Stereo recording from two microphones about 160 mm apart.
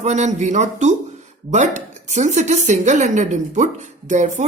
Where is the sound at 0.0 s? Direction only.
45° right (ahead or behind).